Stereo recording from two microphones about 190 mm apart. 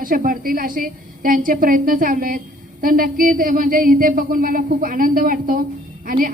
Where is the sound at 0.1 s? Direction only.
45° right (ahead or behind).